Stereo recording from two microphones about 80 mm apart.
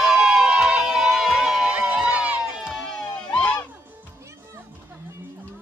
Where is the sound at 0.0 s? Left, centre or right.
Centre.